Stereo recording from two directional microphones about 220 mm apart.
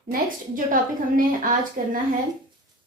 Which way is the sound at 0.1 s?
40° right (ahead or behind).